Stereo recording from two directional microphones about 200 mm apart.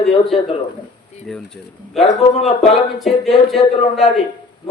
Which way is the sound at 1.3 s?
5° left (ahead or behind).